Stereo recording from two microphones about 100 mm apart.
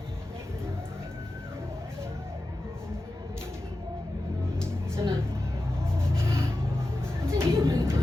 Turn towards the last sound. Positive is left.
turn(degrees=-25)  # may be behind; listen again after turning